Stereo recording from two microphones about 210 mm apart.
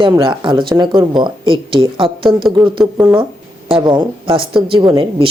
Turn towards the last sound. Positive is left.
turn(degrees=-25)  # may be behind; listen again after turning